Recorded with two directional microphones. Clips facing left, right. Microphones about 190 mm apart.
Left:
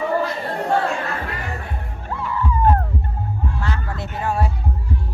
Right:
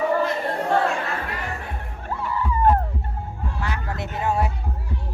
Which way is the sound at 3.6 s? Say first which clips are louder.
Left 1 dB; 20° right (ahead or behind).